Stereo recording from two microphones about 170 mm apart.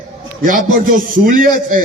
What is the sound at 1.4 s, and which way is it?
Speech, 55° right (ahead or behind).